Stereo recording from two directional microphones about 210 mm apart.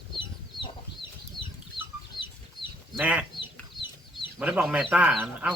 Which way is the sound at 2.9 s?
5° right (ahead or behind).